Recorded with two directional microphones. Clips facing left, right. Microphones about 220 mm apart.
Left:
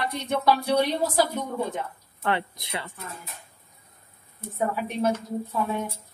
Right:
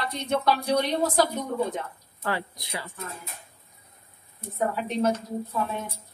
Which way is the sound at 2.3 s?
25° left (ahead or behind).